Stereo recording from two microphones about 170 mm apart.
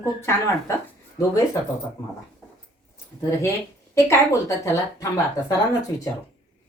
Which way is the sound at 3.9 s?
15° left (ahead or behind).